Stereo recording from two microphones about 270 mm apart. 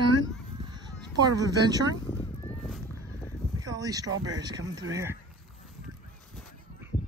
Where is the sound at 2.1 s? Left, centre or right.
Centre.